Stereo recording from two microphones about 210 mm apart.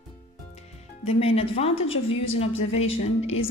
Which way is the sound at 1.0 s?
30° left (ahead or behind).